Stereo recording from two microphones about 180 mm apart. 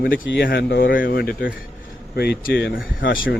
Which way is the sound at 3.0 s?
85° left.